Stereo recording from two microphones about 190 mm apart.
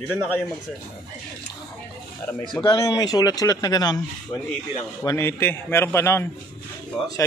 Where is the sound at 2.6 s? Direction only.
20° left (ahead or behind).